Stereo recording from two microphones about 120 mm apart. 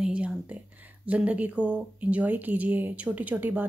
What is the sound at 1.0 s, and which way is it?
Speech, 10° right (ahead or behind).